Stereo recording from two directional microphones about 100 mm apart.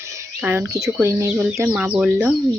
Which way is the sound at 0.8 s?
30° right (ahead or behind).